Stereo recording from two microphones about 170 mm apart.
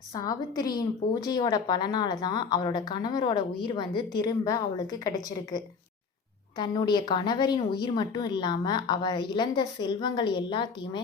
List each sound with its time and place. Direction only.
0.2 s a woman's voice: 25° left (ahead or behind)